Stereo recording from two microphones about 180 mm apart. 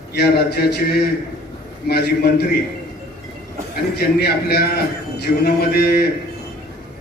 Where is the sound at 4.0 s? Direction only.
60° left (ahead or behind).